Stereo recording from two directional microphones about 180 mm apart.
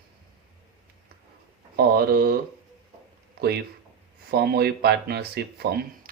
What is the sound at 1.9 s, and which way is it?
Speech, 60° right (ahead or behind).